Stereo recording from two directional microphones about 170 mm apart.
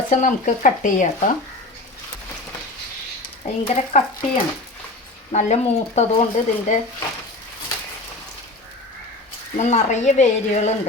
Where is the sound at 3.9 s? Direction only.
45° left (ahead or behind).